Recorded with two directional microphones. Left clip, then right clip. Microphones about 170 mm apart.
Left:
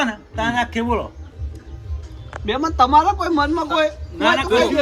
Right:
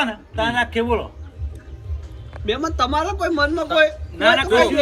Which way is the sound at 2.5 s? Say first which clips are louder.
Left 5 dB; 30° left (ahead or behind).